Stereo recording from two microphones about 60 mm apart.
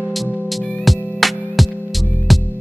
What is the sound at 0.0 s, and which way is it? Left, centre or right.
Music, centre.